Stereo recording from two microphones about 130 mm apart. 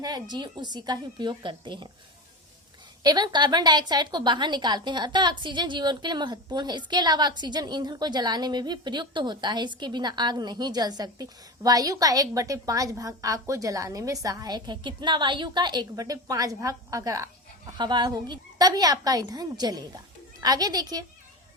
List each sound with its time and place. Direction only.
0.0 s a woman's voice: 35° right (ahead or behind)
3.0 s a woman's voice: 35° right (ahead or behind)